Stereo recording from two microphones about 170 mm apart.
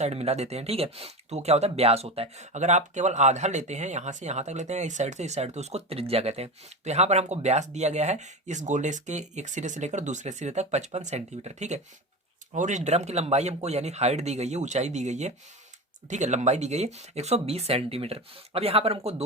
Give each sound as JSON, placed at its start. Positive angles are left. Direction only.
{"t": 0.0, "sound": "speech", "side_deg": -40}